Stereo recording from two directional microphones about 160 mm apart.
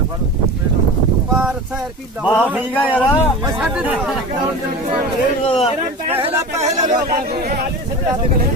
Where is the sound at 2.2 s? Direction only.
10° left (ahead or behind).